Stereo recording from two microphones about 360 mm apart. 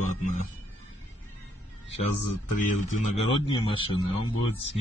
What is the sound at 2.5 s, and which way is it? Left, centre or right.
A man's voice, left.